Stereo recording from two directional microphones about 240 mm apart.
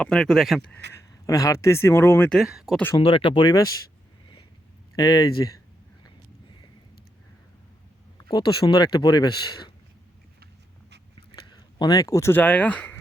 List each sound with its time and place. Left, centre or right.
0.0 s speech: centre
0.9 s speech: centre
2.9 s speech: left
4.9 s speech: centre
8.3 s speech: centre
11.3 s speech: centre